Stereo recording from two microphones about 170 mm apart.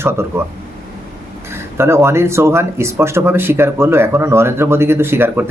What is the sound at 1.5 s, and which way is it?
Speech, 15° right (ahead or behind).